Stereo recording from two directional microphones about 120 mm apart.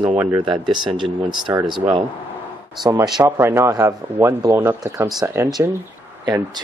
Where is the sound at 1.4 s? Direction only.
40° right (ahead or behind).